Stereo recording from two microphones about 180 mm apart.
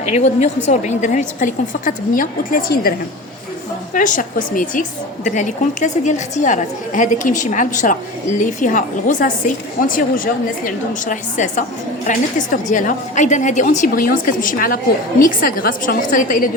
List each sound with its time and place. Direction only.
0.0 s a woman's voice: 40° left (ahead or behind)
3.9 s a woman's voice: 45° left (ahead or behind)